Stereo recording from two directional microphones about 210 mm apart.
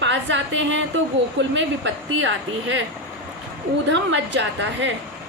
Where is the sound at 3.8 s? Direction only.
60° right (ahead or behind).